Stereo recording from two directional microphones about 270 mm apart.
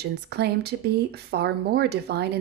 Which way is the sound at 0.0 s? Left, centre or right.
Right.